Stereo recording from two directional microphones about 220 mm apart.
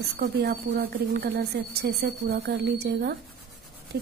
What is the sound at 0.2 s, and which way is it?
A woman's voice, 45° right (ahead or behind).